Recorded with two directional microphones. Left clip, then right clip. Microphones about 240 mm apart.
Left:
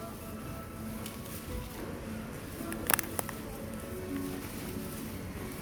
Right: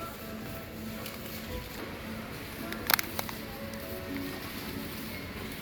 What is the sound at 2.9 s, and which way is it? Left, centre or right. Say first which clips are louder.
Music: right 3 dB; left.